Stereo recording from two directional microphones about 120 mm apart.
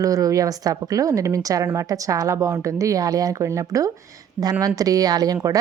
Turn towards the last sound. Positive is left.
turn(degrees=-30)  # may be behind; listen again after turning